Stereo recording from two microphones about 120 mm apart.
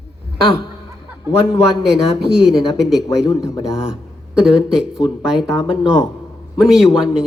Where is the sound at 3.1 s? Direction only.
30° left (ahead or behind).